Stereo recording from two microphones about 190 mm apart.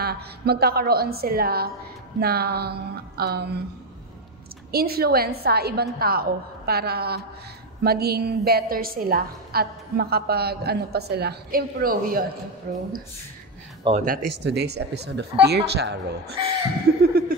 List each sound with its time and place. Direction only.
0.0 s a woman's voice: 55° right (ahead or behind)
4.6 s a woman's voice: 55° right (ahead or behind)
14.0 s a woman's voice: 55° right (ahead or behind)
16.9 s laughter: 60° right (ahead or behind)